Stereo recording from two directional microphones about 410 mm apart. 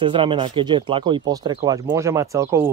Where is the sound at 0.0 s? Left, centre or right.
Centre.